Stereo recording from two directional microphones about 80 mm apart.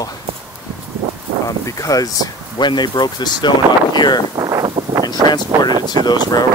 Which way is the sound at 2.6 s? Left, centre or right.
Left.